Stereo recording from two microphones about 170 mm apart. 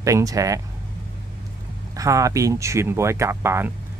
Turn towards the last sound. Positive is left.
turn(degrees=-15)  # may be behind; listen again after turning